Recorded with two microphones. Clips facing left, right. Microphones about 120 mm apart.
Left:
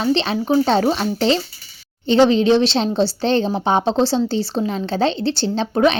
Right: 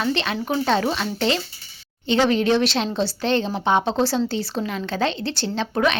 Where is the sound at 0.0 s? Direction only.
30° left (ahead or behind).